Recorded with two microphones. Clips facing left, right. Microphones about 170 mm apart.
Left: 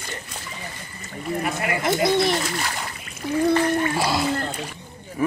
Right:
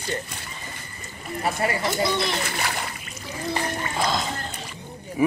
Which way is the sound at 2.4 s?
60° right (ahead or behind).